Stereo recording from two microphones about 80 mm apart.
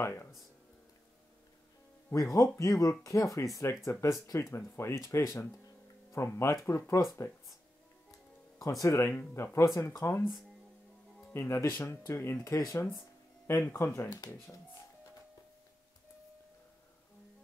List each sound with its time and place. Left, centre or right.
0.0 s speech: left
2.0 s speech: left
8.5 s speech: left
9.0 s speech: left
11.3 s speech: left